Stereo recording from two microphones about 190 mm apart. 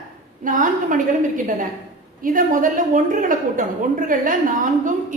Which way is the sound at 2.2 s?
45° right (ahead or behind).